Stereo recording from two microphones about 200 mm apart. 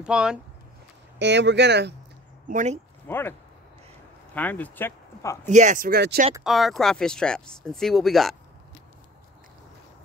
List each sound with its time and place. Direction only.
0.0 s speech: 5° right (ahead or behind)
1.2 s speech: 60° right (ahead or behind)
2.4 s speech: 35° right (ahead or behind)
3.1 s speech: 10° left (ahead or behind)
4.4 s speech: 10° left (ahead or behind)
5.5 s speech: 40° right (ahead or behind)
6.4 s speech: centre (ahead or behind)